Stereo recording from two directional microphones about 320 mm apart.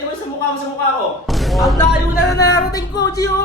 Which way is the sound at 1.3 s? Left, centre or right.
Centre.